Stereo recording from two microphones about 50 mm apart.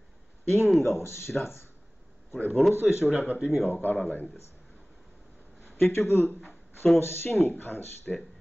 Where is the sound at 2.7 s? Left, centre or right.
Left.